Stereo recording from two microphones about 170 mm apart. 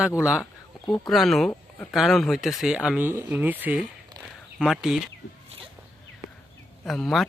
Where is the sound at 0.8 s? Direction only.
25° left (ahead or behind).